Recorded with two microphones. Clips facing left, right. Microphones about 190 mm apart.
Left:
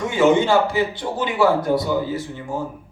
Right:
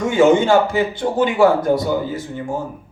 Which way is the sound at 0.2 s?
50° right (ahead or behind).